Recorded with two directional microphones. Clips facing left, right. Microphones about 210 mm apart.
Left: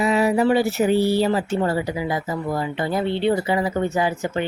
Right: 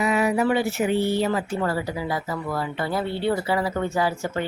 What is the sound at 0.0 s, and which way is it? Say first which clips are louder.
A woman's voice: left 3 dB; 30° left (ahead or behind).